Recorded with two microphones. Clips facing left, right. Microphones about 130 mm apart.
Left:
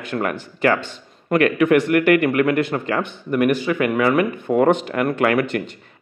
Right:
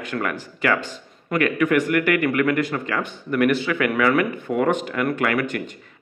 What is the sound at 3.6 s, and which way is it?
Speech, 30° left (ahead or behind).